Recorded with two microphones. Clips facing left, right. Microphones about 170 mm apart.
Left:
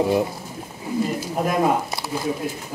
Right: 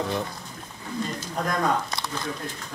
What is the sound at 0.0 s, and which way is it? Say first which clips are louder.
Speech: left 8 dB; 10° left (ahead or behind).